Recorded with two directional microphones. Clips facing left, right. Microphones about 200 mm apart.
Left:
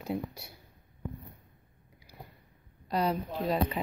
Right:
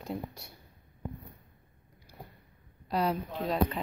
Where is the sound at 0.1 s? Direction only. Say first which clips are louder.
Left 3 dB; 5° left (ahead or behind).